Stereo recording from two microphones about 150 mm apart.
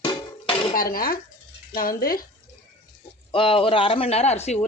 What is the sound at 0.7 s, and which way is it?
Speech, 70° left (ahead or behind).